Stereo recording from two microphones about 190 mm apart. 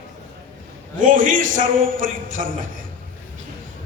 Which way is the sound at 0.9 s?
45° right (ahead or behind).